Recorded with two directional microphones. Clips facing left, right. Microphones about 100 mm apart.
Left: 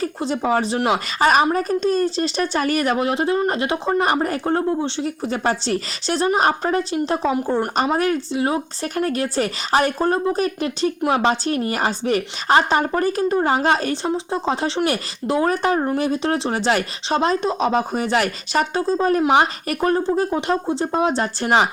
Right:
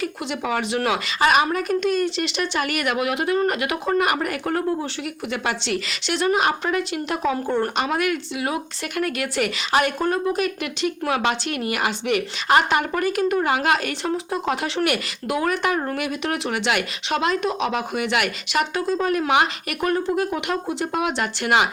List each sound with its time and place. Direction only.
0.0 s speech: 35° left (ahead or behind)